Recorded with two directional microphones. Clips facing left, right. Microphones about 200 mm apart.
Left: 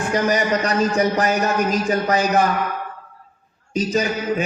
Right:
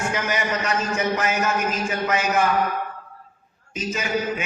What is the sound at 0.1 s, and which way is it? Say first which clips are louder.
A man's voice: left 6 dB; 35° left (ahead or behind).